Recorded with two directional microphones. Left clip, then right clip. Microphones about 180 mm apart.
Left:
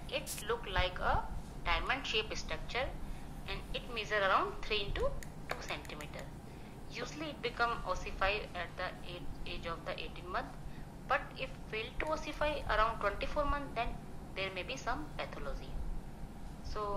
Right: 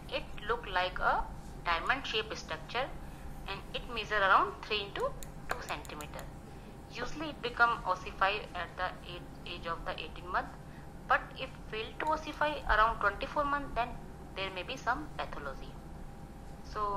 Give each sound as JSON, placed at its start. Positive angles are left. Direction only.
{"t": 0.1, "sound": "a woman's voice", "side_deg": -20}
{"t": 16.8, "sound": "a woman's voice", "side_deg": -20}